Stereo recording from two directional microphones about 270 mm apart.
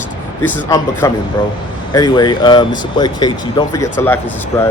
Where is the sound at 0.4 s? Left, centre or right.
Centre.